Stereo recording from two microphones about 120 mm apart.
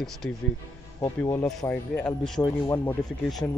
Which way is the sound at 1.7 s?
15° left (ahead or behind).